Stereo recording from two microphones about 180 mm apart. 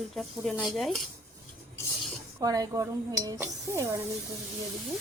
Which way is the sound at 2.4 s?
20° right (ahead or behind).